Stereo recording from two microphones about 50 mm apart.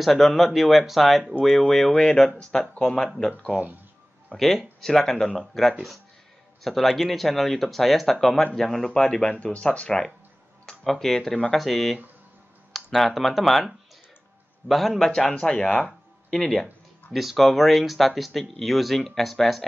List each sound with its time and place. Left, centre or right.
0.0 s speech: centre
1.9 s speech: centre
10.6 s speech: centre
17.1 s speech: centre